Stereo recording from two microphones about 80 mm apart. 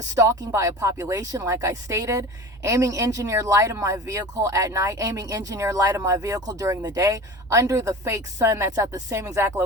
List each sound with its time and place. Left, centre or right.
0.1 s a woman's voice: right